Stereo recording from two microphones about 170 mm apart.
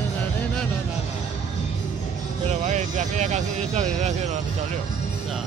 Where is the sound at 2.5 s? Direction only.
45° right (ahead or behind).